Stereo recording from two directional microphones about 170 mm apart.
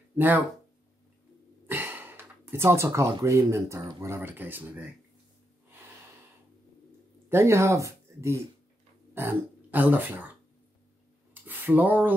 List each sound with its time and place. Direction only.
0.1 s speech: 10° right (ahead or behind)
1.7 s speech: 10° right (ahead or behind)
7.2 s speech: 15° right (ahead or behind)
11.4 s speech: 10° right (ahead or behind)